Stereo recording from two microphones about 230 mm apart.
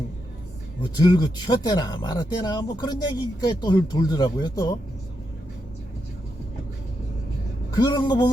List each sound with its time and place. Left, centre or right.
1.0 s speech: centre
7.8 s speech: centre